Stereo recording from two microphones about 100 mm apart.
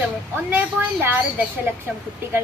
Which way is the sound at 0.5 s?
20° right (ahead or behind).